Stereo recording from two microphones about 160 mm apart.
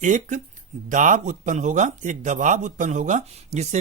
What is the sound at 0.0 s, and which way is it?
Speech, 50° right (ahead or behind).